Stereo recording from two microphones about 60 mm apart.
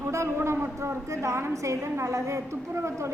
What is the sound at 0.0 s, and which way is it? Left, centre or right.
A woman's voice, right.